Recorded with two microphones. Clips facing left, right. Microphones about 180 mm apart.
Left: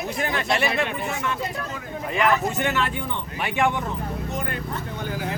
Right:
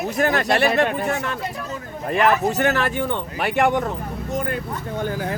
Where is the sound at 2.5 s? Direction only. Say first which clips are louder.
Right 4 dB; 40° right (ahead or behind).